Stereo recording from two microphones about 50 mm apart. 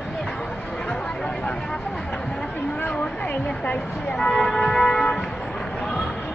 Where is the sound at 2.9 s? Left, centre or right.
Left.